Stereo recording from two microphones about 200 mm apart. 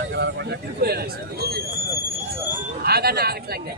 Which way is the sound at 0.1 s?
55° right (ahead or behind).